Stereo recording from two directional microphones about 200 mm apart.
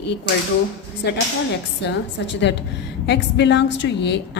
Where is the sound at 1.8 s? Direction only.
60° left (ahead or behind).